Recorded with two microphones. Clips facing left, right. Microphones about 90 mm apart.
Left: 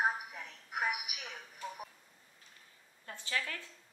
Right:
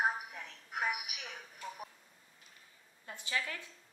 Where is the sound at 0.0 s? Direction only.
Centre (ahead or behind).